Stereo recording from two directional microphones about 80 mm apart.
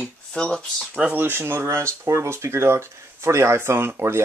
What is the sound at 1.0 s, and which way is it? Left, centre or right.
Speech, centre.